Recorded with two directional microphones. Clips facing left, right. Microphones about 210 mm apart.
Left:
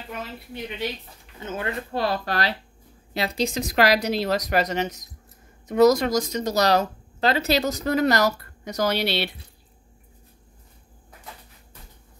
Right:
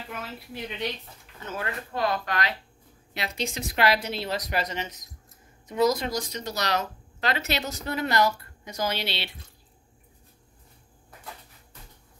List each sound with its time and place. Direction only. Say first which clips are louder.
0.1 s a woman's voice: left 4 dB; centre (ahead or behind)
1.4 s speech: left 4 dB; 25° left (ahead or behind); by 4.7 s 45° left (ahead or behind)
5.7 s speech: left 7 dB; 75° left (ahead or behind)
6.0 s speech: left 7 dB; 45° left (ahead or behind)
8.6 s speech: left 6 dB; 70° left (ahead or behind)